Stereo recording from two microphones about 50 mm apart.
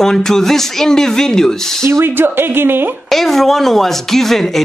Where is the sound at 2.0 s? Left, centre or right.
Right.